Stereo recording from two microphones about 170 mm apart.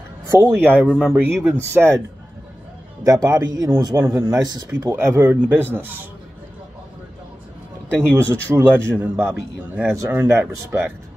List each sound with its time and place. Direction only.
0.3 s speech: 10° right (ahead or behind)
3.0 s speech: 20° right (ahead or behind)
8.5 s speech: 10° right (ahead or behind)